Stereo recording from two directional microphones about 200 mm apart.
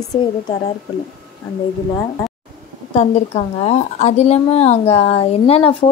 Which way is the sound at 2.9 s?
30° left (ahead or behind).